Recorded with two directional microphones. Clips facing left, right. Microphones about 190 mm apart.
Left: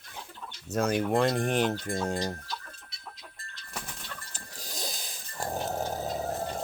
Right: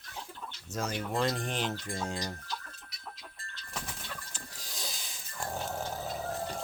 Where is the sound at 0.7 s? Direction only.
60° left (ahead or behind).